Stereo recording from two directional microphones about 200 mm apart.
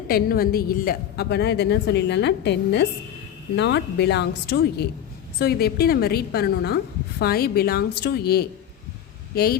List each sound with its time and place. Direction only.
0.1 s a woman's voice: 50° left (ahead or behind)